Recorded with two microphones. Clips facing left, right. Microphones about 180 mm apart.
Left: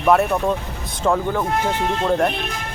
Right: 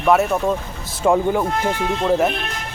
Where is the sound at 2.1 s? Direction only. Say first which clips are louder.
Right 2 dB; 5° right (ahead or behind).